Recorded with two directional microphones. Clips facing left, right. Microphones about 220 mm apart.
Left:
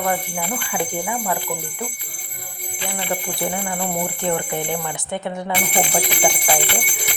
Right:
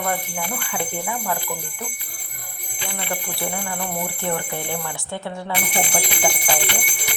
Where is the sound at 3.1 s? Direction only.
15° left (ahead or behind).